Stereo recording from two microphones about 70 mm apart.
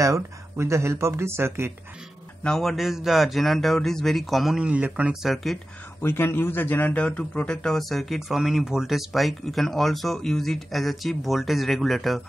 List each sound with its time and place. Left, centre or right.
0.0 s speech: right
2.4 s a man's voice: centre
4.6 s speech: centre
5.2 s a man's voice: centre
6.0 s a man's voice: left; by 12.2 s centre